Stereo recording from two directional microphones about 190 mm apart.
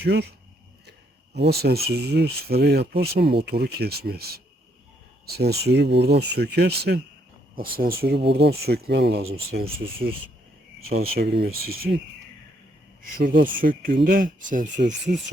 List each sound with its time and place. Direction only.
0.0 s speech: 60° right (ahead or behind)
10.8 s a sound: 55° right (ahead or behind)
11.2 s speech: 55° right (ahead or behind)
13.0 s speech: 50° right (ahead or behind)